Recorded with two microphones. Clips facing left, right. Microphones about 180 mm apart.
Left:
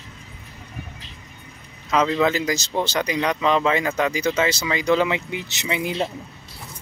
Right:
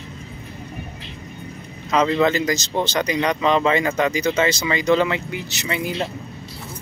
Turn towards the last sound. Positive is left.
turn(degrees=15)  # may be behind; listen again after turning